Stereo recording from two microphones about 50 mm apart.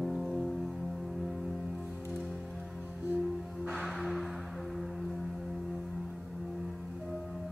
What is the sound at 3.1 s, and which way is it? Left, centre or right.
Music, centre.